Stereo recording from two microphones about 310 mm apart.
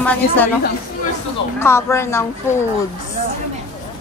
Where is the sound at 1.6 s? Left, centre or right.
Centre.